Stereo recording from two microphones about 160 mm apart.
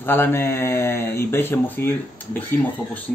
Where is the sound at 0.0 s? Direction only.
15° left (ahead or behind).